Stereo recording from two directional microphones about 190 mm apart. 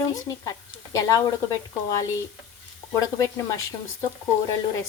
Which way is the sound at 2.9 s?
15° left (ahead or behind).